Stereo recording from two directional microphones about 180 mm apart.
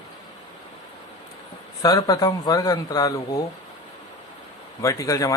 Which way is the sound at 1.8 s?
20° left (ahead or behind).